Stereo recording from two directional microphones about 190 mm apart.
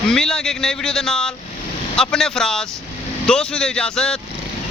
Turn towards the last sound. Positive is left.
turn(degrees=5)  # may be behind; listen again after turning